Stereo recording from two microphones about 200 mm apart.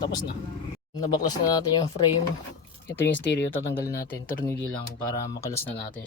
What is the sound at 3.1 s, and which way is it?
Speech, 60° left (ahead or behind).